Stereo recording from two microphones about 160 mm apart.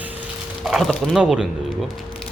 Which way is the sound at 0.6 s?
Centre (ahead or behind).